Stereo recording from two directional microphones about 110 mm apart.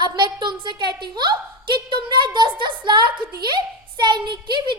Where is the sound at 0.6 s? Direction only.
45° right (ahead or behind).